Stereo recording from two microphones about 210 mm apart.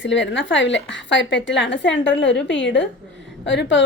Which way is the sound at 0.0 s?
60° left (ahead or behind).